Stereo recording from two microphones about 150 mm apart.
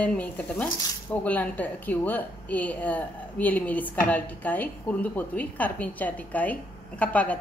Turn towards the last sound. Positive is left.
turn(degrees=10)  # may be behind; listen again after turning